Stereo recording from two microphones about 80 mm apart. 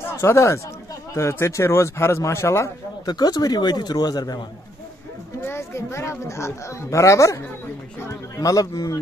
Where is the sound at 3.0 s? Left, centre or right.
Left.